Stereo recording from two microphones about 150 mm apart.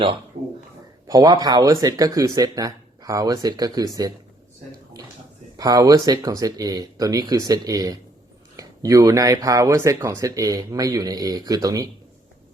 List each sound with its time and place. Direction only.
1.0 s speech: 25° right (ahead or behind)
5.5 s speech: 25° right (ahead or behind)